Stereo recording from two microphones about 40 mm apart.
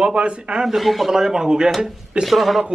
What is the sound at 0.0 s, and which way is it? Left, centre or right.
Speech, right.